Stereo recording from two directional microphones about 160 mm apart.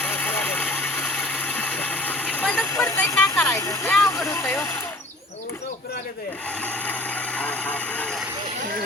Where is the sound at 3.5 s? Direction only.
20° left (ahead or behind).